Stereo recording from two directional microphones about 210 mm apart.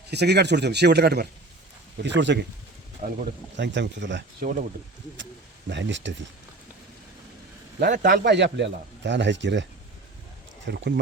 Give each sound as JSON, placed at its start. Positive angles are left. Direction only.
{"t": 0.1, "sound": "speech", "side_deg": -50}
{"t": 3.0, "sound": "a man's voice", "side_deg": -40}
{"t": 3.6, "sound": "speech", "side_deg": -55}
{"t": 7.8, "sound": "a man's voice", "side_deg": -40}
{"t": 8.1, "sound": "speech", "side_deg": -55}
{"t": 10.7, "sound": "speech", "side_deg": -50}